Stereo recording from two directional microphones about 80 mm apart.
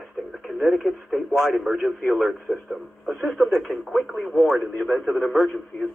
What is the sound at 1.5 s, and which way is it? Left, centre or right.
A man's voice, centre.